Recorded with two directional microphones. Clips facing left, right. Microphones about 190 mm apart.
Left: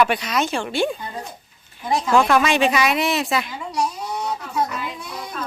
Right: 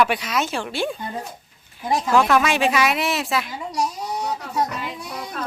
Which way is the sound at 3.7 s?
40° right (ahead or behind).